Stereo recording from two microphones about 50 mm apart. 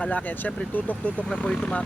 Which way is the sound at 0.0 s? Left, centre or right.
Left.